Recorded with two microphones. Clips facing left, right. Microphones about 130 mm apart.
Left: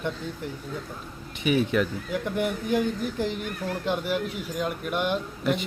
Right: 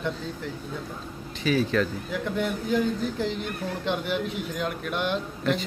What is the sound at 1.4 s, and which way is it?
A man's voice, 20° left (ahead or behind).